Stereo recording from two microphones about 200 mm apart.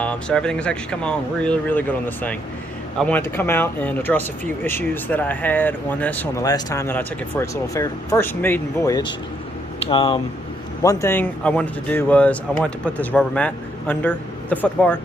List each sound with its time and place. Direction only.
0.0 s speech: 5° left (ahead or behind); by 10.2 s 25° left (ahead or behind)
10.8 s speech: 10° left (ahead or behind)